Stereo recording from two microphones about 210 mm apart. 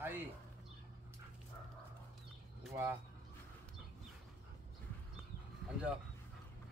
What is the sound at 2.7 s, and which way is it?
Speech, 15° right (ahead or behind).